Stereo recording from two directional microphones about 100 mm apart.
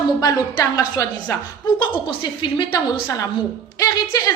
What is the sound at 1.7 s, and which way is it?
A woman's voice, 45° left (ahead or behind).